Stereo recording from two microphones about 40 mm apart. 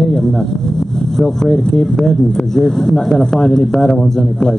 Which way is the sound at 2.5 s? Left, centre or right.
Centre.